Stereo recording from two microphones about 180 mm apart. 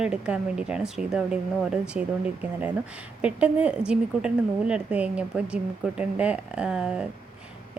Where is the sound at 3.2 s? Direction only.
5° right (ahead or behind).